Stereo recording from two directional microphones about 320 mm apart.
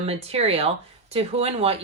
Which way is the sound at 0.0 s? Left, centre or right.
Centre.